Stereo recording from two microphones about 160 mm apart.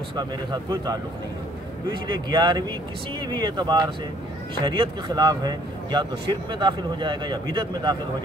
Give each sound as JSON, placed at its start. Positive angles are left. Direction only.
{"t": 0.1, "sound": "speech", "side_deg": -25}